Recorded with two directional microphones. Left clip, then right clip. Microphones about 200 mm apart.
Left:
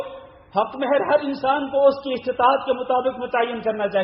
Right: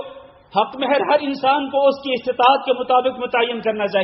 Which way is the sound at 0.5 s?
30° right (ahead or behind).